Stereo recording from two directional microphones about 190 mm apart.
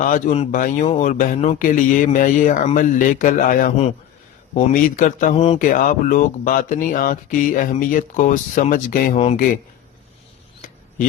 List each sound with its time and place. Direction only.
0.0 s speech: 40° left (ahead or behind)